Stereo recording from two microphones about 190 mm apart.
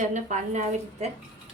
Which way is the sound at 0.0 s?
40° right (ahead or behind).